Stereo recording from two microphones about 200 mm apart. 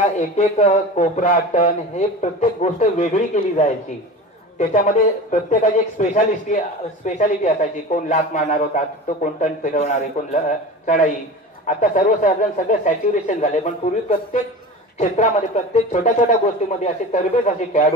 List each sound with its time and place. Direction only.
0.0 s a man's voice: 35° left (ahead or behind)